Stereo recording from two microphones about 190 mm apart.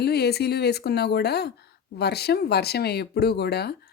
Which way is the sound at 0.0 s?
60° left (ahead or behind).